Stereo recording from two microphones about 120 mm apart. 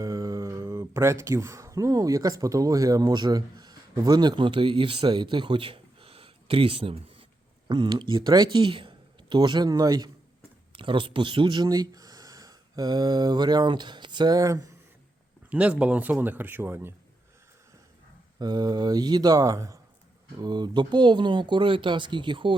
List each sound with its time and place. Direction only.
0.0 s speech: 30° right (ahead or behind)
10.7 s speech: 45° right (ahead or behind); by 14.7 s 30° right (ahead or behind)
15.4 s speech: 10° right (ahead or behind)
18.3 s speech: 35° right (ahead or behind)